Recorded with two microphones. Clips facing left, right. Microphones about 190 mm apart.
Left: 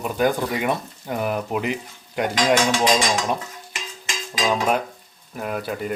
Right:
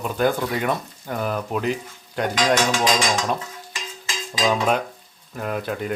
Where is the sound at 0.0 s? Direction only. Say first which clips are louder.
Even; 10° left (ahead or behind).